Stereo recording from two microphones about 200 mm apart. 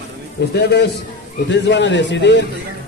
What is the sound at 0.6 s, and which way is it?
A man's voice, 55° left (ahead or behind).